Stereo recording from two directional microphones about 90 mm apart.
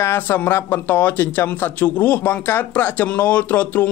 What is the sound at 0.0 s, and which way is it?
Speech, 30° left (ahead or behind).